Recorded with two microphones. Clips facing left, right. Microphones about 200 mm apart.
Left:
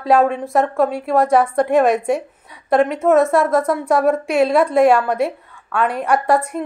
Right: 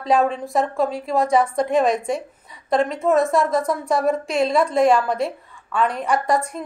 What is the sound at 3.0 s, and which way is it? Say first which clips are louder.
A woman's voice: left 3 dB; 80° left.